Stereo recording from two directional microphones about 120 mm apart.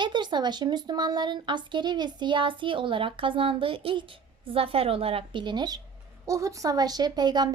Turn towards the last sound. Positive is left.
turn(degrees=-35)  # may be behind; listen again after turning